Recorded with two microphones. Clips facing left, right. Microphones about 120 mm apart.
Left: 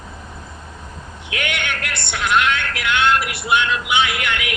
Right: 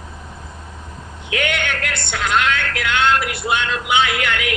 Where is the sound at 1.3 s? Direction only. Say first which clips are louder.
Right 3 dB; 40° right (ahead or behind).